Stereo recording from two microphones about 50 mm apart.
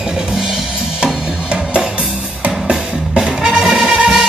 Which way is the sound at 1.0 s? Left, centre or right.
Right.